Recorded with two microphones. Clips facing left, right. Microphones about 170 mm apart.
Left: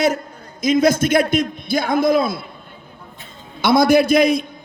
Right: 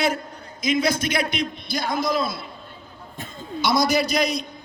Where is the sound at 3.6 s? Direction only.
55° left (ahead or behind).